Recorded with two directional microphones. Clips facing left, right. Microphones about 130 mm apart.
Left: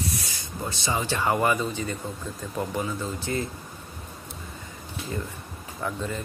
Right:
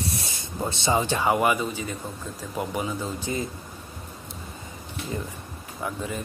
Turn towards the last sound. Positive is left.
turn(degrees=-10)  # may be behind; listen again after turning